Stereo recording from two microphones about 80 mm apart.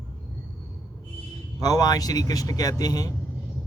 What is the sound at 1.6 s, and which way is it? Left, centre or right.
Speech, left.